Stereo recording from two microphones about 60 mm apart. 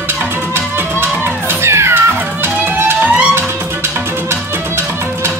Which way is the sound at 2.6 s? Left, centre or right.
Right.